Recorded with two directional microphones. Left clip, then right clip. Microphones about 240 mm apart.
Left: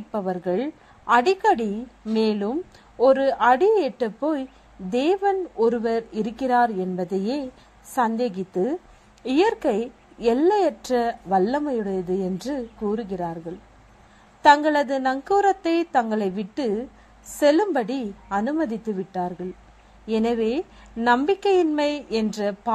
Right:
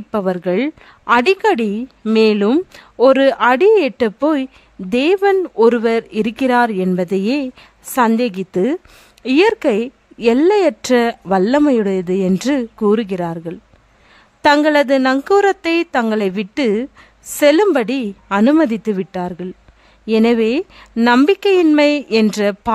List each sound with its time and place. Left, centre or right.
0.1 s a woman's voice: right